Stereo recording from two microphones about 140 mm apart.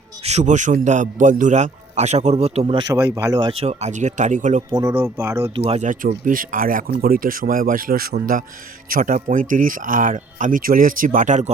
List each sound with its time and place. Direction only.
0.3 s a man's voice: 55° right (ahead or behind)
2.7 s speech: 25° right (ahead or behind)
3.6 s a man's voice: 50° right (ahead or behind)
4.7 s speech: 20° right (ahead or behind)
5.5 s speech: 45° right (ahead or behind)
5.8 s speech: 75° right (ahead or behind); by 9.1 s 90° right
9.3 s speech: 75° right (ahead or behind)